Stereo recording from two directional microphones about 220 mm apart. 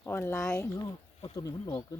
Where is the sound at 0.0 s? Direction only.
10° left (ahead or behind).